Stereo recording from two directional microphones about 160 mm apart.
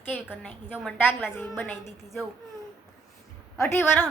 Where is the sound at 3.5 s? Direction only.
15° left (ahead or behind).